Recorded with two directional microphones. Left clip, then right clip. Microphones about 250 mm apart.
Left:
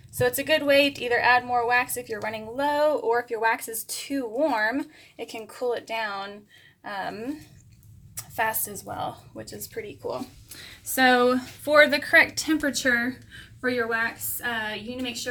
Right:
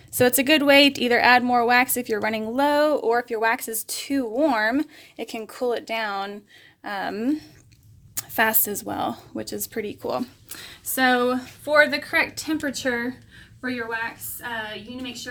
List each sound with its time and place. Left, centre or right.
0.1 s a woman's voice: right
10.9 s a woman's voice: centre